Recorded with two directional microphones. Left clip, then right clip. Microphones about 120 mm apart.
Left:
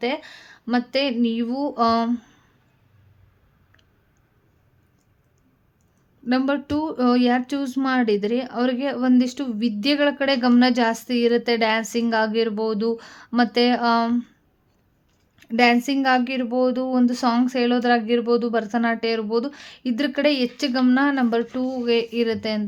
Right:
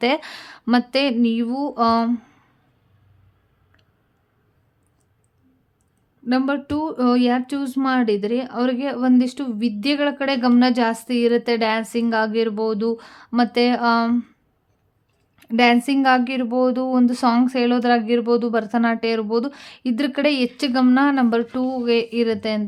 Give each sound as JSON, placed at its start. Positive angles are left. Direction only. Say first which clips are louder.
{"t": 0.0, "sound": "speech", "louder": "right 5 dB", "side_deg": -55}
{"t": 0.8, "sound": "speech", "louder": "right 1 dB", "side_deg": -30}
{"t": 1.2, "sound": "a woman's voice", "louder": "right 2 dB", "side_deg": -15}
{"t": 6.2, "sound": "a woman's voice", "louder": "right 1 dB", "side_deg": -5}
{"t": 15.4, "sound": "a woman's voice", "louder": "right 1 dB", "side_deg": -15}